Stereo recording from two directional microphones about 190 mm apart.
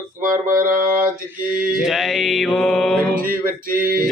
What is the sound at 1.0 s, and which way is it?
Mantra, 10° right (ahead or behind).